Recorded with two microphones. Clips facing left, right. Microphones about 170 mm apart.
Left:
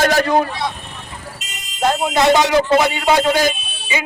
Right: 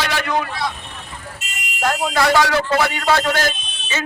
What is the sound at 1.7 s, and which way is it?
Speech, 25° left (ahead or behind).